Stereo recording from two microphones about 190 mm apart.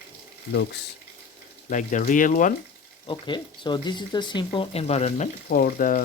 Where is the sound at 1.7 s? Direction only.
40° left (ahead or behind).